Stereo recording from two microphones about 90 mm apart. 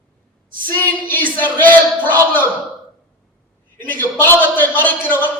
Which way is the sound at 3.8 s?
20° left (ahead or behind).